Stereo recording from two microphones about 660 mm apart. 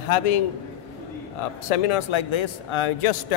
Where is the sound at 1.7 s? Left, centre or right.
Left.